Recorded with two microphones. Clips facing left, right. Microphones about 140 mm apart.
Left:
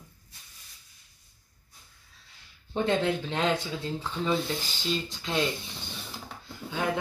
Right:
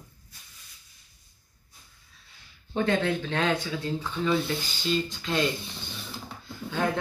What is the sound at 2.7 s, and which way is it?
Speech, 25° left (ahead or behind).